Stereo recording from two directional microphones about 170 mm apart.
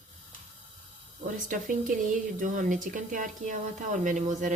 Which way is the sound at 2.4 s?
50° right (ahead or behind).